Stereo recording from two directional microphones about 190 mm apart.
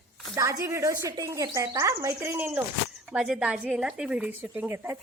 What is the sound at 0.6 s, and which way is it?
A woman's voice, 15° right (ahead or behind).